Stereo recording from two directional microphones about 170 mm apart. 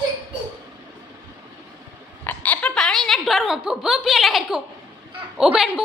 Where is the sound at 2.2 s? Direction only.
10° left (ahead or behind).